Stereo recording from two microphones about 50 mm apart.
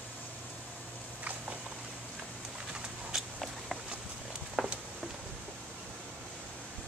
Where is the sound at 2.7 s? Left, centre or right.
Centre.